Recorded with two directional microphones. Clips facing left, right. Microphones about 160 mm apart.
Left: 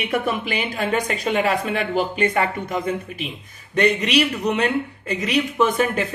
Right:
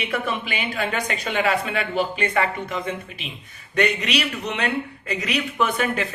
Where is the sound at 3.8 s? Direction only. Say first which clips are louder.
Left 4 dB; 40° left (ahead or behind).